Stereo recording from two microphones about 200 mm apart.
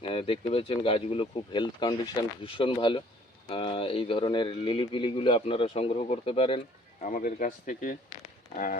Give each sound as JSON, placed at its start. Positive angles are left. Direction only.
{"t": 0.1, "sound": "speech", "side_deg": 25}
{"t": 7.0, "sound": "speech", "side_deg": 45}